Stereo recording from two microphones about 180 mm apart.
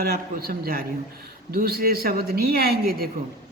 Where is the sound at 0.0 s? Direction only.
55° right (ahead or behind).